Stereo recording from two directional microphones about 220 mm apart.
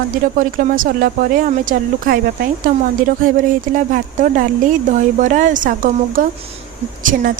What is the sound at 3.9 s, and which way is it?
A woman's voice, 35° right (ahead or behind).